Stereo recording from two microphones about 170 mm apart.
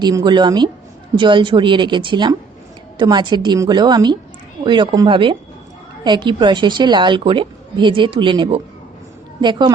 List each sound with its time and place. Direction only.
0.0 s a woman's voice: 25° right (ahead or behind)